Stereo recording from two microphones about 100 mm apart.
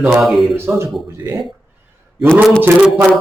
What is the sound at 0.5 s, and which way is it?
Speech, 25° right (ahead or behind).